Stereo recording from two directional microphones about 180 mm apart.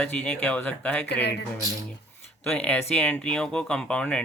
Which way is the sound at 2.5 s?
5° left (ahead or behind).